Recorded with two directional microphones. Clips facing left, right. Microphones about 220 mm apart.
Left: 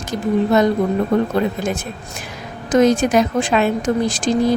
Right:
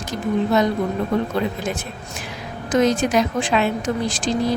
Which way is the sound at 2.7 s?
50° left (ahead or behind).